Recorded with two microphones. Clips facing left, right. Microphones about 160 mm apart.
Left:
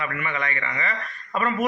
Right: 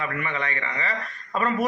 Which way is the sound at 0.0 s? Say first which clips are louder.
Even; 35° right (ahead or behind).